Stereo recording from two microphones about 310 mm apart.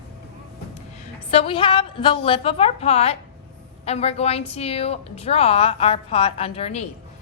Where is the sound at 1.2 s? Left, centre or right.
Centre.